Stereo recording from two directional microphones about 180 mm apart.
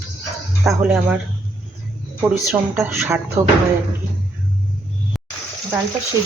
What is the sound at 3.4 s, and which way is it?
Speech, 40° right (ahead or behind).